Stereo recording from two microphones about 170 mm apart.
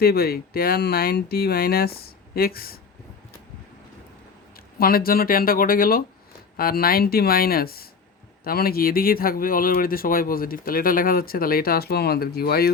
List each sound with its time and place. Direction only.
0.0 s speech: 65° left (ahead or behind)
4.5 s speech: 60° left (ahead or behind)